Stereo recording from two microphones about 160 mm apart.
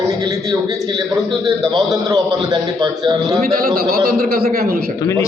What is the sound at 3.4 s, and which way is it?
A man's voice, 70° right (ahead or behind).